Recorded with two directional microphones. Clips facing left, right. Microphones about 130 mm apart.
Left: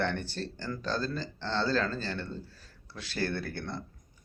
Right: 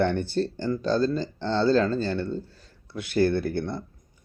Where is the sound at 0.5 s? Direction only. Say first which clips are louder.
Right 10 dB; 20° right (ahead or behind).